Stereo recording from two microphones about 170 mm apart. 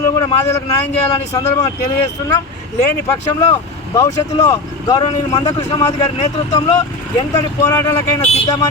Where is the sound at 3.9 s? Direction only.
20° left (ahead or behind).